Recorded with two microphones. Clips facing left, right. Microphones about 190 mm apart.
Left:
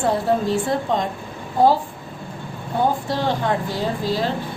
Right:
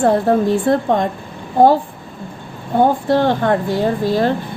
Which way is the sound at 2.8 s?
55° right (ahead or behind).